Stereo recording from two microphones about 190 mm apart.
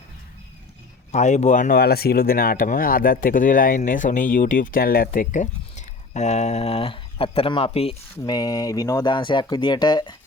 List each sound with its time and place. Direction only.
1.1 s speech: 35° left (ahead or behind)
8.1 s speech: 20° left (ahead or behind)